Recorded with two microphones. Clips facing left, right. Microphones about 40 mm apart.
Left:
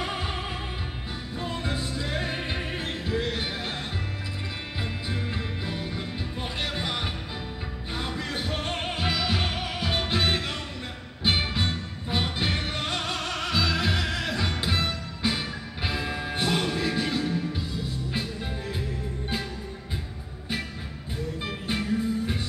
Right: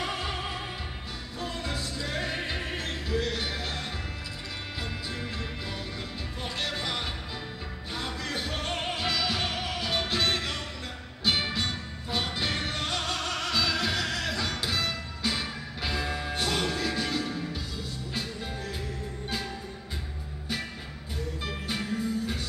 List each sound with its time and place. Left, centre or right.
0.0 s music: centre
5.1 s music: centre
21.5 s music: centre